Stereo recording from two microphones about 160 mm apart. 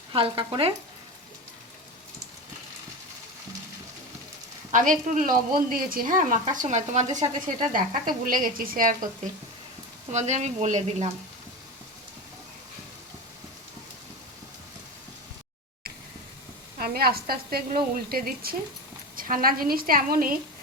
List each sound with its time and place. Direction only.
0.1 s frying: 35° right (ahead or behind)
4.7 s speech: 55° right (ahead or behind)
7.2 s speech: 60° right (ahead or behind)
10.1 s speech: 45° right (ahead or behind)
16.8 s speech: 70° right (ahead or behind)